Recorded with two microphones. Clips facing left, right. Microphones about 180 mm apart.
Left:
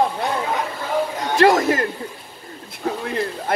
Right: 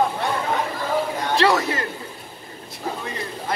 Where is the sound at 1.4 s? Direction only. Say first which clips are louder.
Left 6 dB; 45° left (ahead or behind).